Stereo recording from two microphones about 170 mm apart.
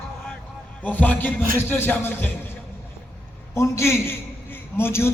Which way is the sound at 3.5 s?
15° left (ahead or behind).